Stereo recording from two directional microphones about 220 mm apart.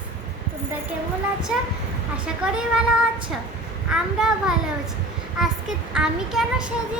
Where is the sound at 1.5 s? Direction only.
5° right (ahead or behind).